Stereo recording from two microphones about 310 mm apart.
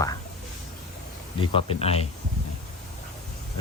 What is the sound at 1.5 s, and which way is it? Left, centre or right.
Speech, centre.